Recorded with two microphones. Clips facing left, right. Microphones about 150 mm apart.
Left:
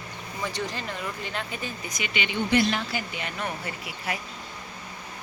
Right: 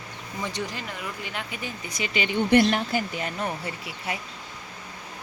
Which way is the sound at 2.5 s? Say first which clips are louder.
Right 4 dB; 50° right (ahead or behind).